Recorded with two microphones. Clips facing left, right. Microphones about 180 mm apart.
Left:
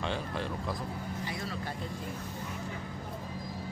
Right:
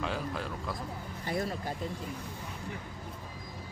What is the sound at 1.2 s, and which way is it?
Speech, 50° right (ahead or behind).